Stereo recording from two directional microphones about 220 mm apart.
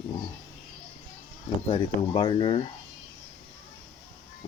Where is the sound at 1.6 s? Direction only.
20° left (ahead or behind).